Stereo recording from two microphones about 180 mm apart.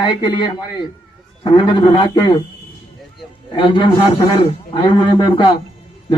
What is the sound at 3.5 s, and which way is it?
Speech, 25° left (ahead or behind).